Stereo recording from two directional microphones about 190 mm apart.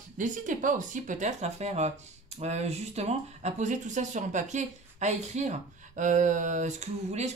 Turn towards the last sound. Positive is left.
turn(degrees=-35)  # may be behind; listen again after turning